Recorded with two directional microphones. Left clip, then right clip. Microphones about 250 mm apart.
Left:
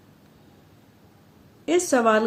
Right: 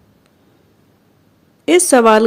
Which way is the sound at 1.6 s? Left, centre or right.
Right.